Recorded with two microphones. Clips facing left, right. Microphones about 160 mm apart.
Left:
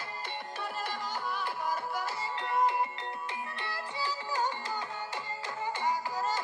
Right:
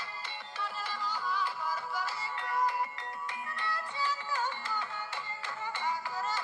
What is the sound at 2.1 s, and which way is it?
Music, 20° left (ahead or behind).